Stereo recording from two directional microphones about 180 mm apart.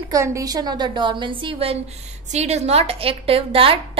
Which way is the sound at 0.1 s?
15° right (ahead or behind).